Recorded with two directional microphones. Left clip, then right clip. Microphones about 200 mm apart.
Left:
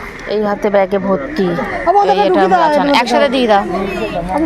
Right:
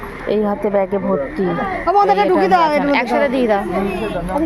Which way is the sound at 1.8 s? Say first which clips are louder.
Left 3 dB; 20° left (ahead or behind).